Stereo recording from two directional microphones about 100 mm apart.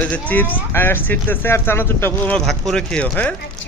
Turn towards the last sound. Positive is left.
turn(degrees=10)  # may be behind; listen again after turning